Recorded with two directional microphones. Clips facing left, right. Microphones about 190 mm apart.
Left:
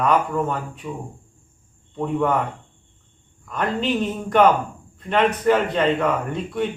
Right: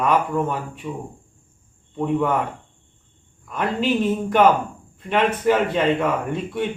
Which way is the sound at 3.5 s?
5° right (ahead or behind).